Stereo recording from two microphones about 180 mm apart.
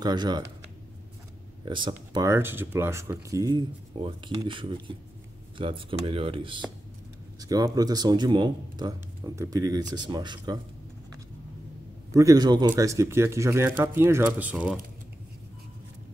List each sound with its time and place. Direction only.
0.0 s speech: 25° right (ahead or behind)
1.6 s speech: 25° right (ahead or behind)
12.1 s speech: 20° right (ahead or behind)